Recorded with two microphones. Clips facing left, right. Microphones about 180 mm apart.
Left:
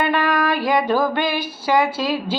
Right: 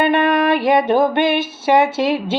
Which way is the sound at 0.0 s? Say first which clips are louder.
Right 4 dB; 25° right (ahead or behind).